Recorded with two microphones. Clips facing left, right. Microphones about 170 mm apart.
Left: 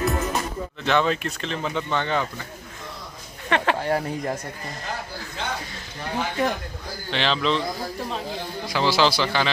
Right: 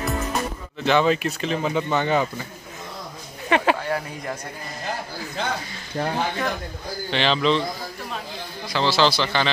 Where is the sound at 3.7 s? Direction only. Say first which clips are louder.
Left 3 dB; 35° left (ahead or behind).